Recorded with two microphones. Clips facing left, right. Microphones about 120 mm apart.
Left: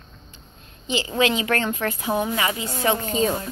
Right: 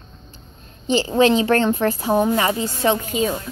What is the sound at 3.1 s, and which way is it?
Speech, 35° left (ahead or behind).